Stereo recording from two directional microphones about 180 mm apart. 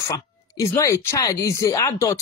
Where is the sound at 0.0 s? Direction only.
15° left (ahead or behind).